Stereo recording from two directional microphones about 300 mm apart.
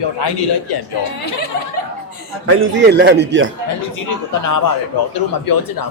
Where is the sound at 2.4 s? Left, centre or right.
Right.